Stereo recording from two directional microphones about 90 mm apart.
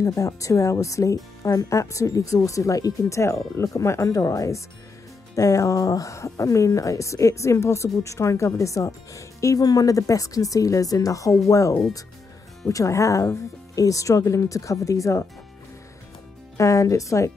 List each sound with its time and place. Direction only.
0.0 s speech: 40° left (ahead or behind)
16.5 s speech: 35° left (ahead or behind)